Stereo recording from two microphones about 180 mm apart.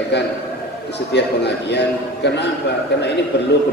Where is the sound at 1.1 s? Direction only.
70° left (ahead or behind).